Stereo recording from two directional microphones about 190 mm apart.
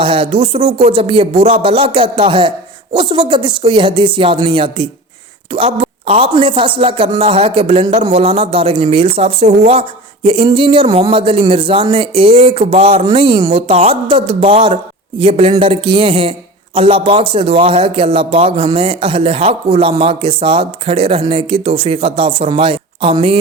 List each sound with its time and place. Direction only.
0.0 s a man's voice: 30° right (ahead or behind)